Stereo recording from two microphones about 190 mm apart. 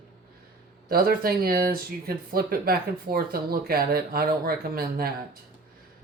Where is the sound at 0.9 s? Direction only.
55° right (ahead or behind).